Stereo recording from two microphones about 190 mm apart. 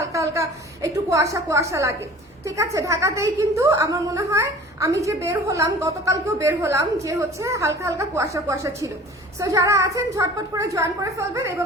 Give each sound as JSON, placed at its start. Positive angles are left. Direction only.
{"t": 0.0, "sound": "a woman's voice", "side_deg": -15}